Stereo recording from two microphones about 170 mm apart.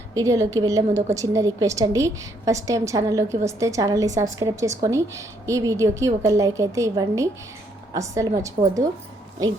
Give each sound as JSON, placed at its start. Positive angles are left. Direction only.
{"t": 0.1, "sound": "a woman's voice", "side_deg": -20}